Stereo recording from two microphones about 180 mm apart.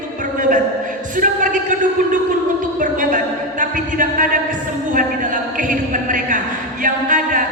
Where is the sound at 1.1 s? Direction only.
45° right (ahead or behind).